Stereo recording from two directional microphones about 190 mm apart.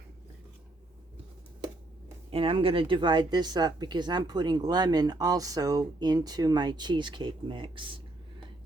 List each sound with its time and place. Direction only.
2.3 s speech: 30° right (ahead or behind)